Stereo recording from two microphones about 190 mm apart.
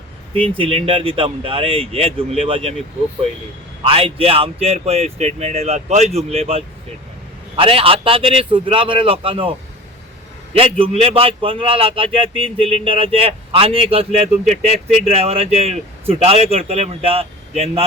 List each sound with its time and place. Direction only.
0.5 s a man's voice: 30° right (ahead or behind)
3.8 s a man's voice: 30° right (ahead or behind)
10.6 s a man's voice: 30° right (ahead or behind)